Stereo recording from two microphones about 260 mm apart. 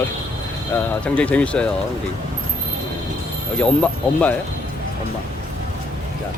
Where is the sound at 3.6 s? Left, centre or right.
Centre.